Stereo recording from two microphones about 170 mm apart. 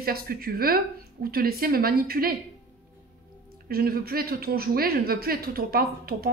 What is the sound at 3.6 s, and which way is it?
A woman's voice, 60° right (ahead or behind).